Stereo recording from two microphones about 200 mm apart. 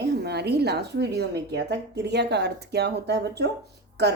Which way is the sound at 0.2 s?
55° right (ahead or behind).